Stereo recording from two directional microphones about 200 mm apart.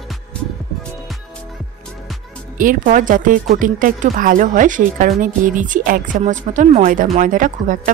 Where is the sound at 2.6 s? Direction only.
45° right (ahead or behind).